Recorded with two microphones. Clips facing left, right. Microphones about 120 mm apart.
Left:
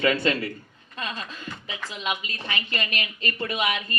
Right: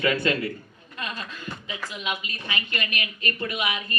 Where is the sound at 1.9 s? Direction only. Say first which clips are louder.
Left 2 dB; 30° left (ahead or behind).